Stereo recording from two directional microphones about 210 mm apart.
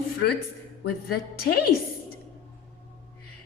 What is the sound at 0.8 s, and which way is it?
Speech, 45° left (ahead or behind).